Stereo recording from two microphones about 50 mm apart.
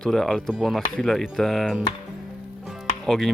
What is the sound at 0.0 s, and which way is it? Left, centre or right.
Speech, centre.